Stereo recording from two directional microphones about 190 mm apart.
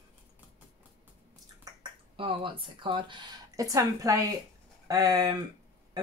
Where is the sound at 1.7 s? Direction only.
20° right (ahead or behind).